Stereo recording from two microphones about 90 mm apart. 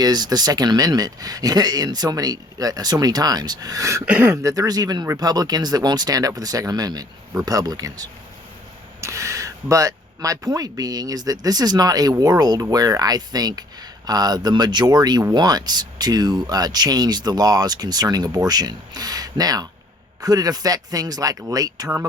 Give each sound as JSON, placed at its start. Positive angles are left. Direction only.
{"t": 0.0, "sound": "speech", "side_deg": -50}
{"t": 4.0, "sound": "speech", "side_deg": -15}
{"t": 4.3, "sound": "speech", "side_deg": -40}